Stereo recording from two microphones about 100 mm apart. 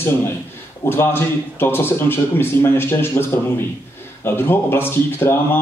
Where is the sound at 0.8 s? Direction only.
25° left (ahead or behind).